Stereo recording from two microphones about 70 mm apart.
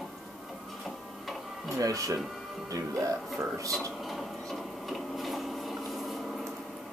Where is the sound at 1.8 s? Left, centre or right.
Right.